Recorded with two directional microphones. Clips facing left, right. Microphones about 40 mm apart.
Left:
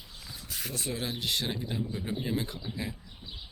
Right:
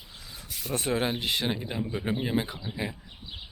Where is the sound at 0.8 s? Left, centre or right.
Right.